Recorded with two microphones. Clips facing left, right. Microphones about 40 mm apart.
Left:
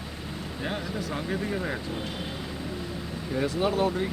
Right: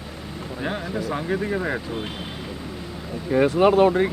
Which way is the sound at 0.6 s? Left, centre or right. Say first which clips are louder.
Right 5 dB; centre.